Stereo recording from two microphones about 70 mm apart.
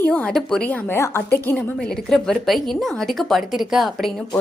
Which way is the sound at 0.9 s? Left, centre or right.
Left.